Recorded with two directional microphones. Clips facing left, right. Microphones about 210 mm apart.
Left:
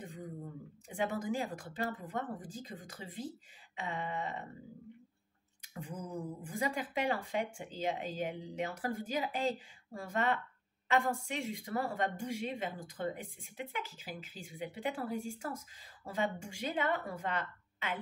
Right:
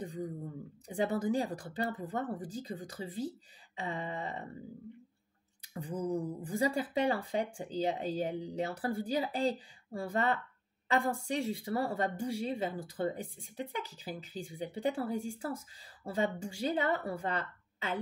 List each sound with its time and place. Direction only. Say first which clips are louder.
0.0 s a sound: right 7 dB; 35° right (ahead or behind)
0.8 s speech: right 4 dB; 35° right (ahead or behind)
5.6 s speech: right 7 dB; 35° right (ahead or behind)